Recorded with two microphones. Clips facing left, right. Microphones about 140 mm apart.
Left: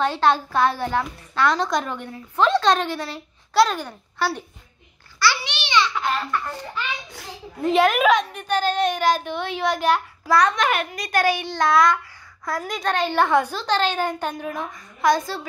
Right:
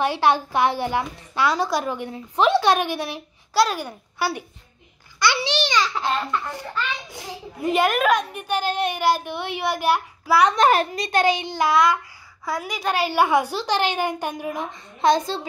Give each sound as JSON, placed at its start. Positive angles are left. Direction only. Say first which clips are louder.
{"t": 0.0, "sound": "a woman's voice", "louder": "even", "side_deg": -10}
{"t": 5.4, "sound": "a child's voice", "louder": "right 1 dB", "side_deg": -40}
{"t": 6.0, "sound": "a child's voice", "louder": "even", "side_deg": -20}
{"t": 7.6, "sound": "a woman's voice", "louder": "left 2 dB", "side_deg": 0}
{"t": 10.5, "sound": "a child's voice", "louder": "right 5 dB", "side_deg": -35}
{"t": 11.7, "sound": "a child's voice", "louder": "left 1 dB", "side_deg": 0}